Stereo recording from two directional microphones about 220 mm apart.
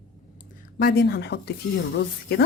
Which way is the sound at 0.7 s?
50° left (ahead or behind).